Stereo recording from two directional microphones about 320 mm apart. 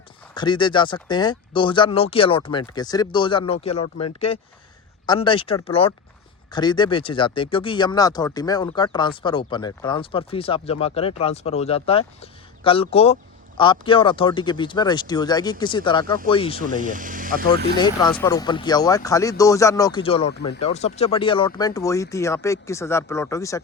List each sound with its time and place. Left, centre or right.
0.3 s speech: centre
16.6 s speech: right
17.7 s speech: centre